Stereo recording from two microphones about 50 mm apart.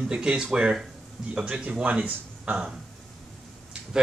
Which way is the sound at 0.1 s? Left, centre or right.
Centre.